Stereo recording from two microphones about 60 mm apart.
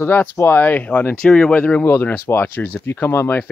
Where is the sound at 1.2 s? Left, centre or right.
Centre.